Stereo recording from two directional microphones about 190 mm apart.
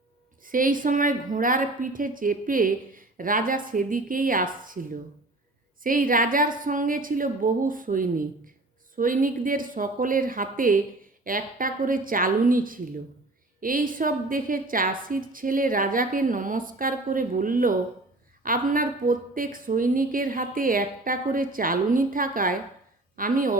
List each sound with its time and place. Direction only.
0.4 s a woman's voice: 45° right (ahead or behind)